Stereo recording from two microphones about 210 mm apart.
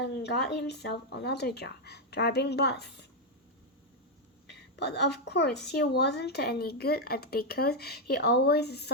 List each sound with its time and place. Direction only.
0.0 s speech: 50° left (ahead or behind)
4.5 s a woman's voice: 50° left (ahead or behind)